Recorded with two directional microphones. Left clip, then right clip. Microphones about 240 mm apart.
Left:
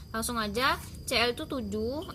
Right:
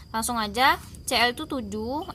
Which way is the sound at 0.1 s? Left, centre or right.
Right.